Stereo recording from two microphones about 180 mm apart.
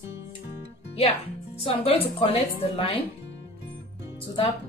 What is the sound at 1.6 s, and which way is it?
Speech, 30° left (ahead or behind).